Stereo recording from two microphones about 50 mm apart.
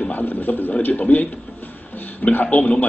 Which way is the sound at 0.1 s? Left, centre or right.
Left.